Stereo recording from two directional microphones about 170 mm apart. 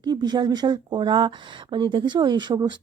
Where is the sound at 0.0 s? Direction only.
25° right (ahead or behind).